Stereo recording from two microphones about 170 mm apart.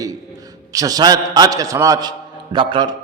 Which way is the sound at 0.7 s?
20° right (ahead or behind).